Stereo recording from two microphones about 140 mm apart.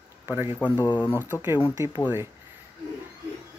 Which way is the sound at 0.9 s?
15° left (ahead or behind).